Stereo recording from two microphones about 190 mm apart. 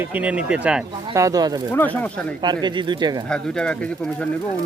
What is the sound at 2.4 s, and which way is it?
Speech, 25° right (ahead or behind).